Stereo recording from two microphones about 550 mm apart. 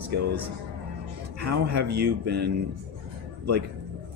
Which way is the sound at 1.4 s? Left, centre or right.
Right.